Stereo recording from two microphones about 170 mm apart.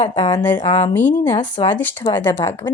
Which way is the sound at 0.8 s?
10° left (ahead or behind).